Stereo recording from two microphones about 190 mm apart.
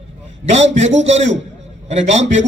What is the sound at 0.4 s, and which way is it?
A man's voice, 35° right (ahead or behind).